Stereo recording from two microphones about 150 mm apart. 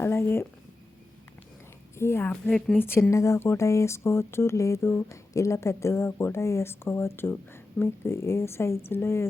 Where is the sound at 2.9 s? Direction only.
15° left (ahead or behind).